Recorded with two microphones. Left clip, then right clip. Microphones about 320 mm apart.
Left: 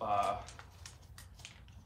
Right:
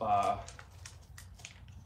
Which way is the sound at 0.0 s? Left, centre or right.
Centre.